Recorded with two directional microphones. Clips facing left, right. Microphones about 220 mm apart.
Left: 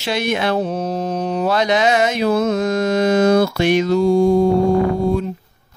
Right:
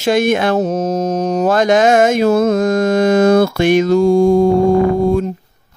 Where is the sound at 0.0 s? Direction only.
50° right (ahead or behind).